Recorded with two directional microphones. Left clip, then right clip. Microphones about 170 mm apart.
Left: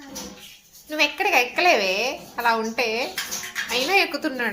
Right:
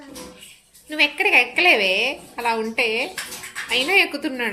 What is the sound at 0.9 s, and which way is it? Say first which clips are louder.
A woman's voice: right 3 dB; 15° right (ahead or behind).